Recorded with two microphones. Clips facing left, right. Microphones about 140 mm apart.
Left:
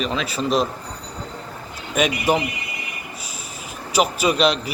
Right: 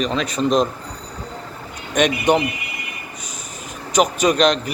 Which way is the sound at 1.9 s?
5° left (ahead or behind).